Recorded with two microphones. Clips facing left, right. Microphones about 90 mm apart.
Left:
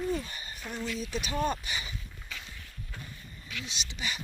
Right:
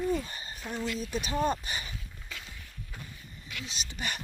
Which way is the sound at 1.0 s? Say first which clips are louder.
Right 1 dB; 40° right (ahead or behind).